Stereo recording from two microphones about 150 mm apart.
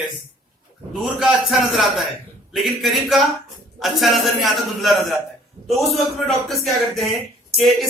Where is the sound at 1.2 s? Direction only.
Centre (ahead or behind).